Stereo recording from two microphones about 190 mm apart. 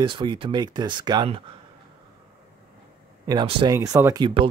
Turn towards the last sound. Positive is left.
turn(degrees=-15)  # may be behind; listen again after turning